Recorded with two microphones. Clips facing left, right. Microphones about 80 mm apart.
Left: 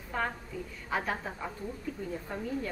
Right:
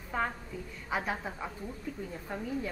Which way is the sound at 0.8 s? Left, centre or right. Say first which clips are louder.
Left 1 dB; centre.